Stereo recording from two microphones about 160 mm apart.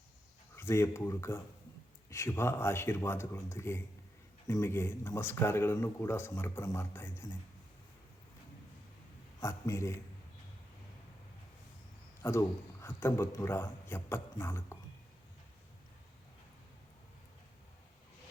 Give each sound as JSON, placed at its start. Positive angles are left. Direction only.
{"t": 0.5, "sound": "speech", "side_deg": 15}
{"t": 9.4, "sound": "speech", "side_deg": 20}
{"t": 12.2, "sound": "speech", "side_deg": 15}